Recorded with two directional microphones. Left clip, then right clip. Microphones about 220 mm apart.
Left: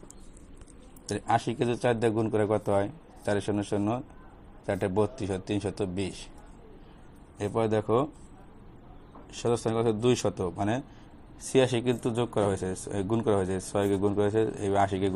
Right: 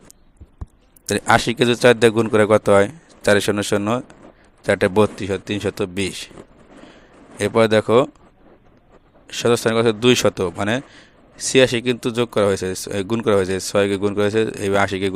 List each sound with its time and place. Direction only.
1.2 s speech: 50° right (ahead or behind)
1.5 s a man's voice: 75° right (ahead or behind)
7.3 s a man's voice: 75° right (ahead or behind); by 8.1 s 60° right (ahead or behind)
9.5 s speech: 50° right (ahead or behind)
10.3 s a man's voice: 70° right (ahead or behind)